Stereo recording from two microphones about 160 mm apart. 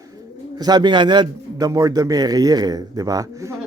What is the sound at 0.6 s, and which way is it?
A man's voice, 25° right (ahead or behind).